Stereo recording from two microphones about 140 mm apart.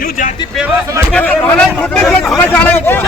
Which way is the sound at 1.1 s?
10° left (ahead or behind).